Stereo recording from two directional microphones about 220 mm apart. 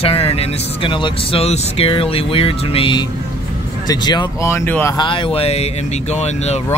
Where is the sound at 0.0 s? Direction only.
25° left (ahead or behind); by 4.9 s 10° left (ahead or behind).